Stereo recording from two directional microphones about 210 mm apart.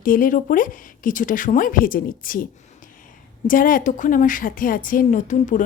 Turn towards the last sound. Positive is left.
turn(degrees=35)  # may be behind; listen again after turning